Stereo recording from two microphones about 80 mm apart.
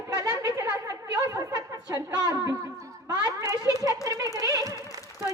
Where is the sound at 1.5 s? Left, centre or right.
Right.